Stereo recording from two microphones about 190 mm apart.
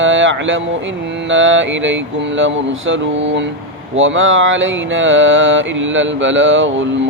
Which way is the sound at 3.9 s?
90° right.